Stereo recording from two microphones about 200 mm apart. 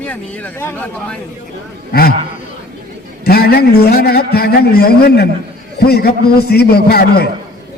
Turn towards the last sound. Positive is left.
turn(degrees=50)  # may be behind; listen again after turning